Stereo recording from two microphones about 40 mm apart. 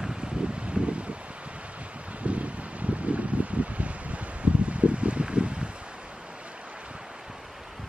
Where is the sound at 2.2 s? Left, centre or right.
Right.